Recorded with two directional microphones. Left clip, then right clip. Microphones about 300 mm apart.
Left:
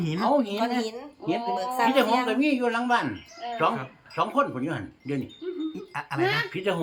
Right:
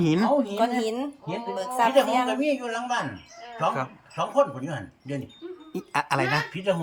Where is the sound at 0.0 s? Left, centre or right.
Centre.